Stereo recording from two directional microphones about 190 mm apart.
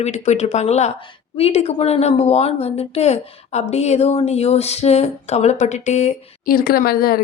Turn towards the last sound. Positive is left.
turn(degrees=50)  # may be behind; listen again after turning